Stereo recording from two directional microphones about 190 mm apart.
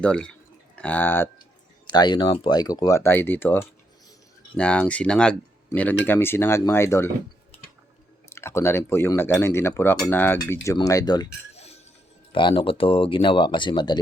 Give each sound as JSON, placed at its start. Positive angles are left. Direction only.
{"t": 0.0, "sound": "speech", "side_deg": 5}
{"t": 1.9, "sound": "speech", "side_deg": 25}
{"t": 8.3, "sound": "speech", "side_deg": 15}
{"t": 11.5, "sound": "music", "side_deg": 35}
{"t": 12.3, "sound": "speech", "side_deg": 25}